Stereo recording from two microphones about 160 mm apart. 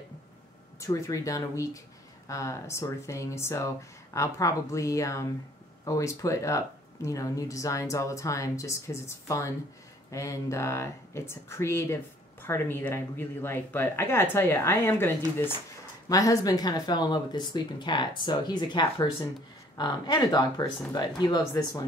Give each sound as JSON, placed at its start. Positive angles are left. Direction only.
{"t": 0.7, "sound": "speech", "side_deg": 20}